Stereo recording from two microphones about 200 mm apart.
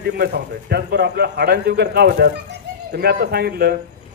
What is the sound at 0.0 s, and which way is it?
A man's voice, 55° right (ahead or behind).